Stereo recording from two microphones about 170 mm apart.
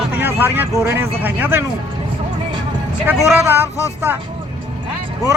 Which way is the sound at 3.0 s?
10° right (ahead or behind).